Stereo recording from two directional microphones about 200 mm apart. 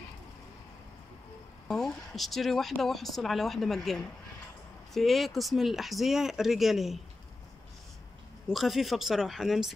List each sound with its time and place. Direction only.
1.7 s speech: centre (ahead or behind)
8.5 s speech: centre (ahead or behind)